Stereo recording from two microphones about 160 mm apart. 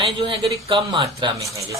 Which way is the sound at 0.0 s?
35° right (ahead or behind).